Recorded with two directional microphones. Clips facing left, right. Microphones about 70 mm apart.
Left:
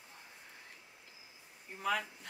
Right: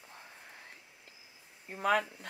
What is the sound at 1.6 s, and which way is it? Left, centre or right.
Speech, right.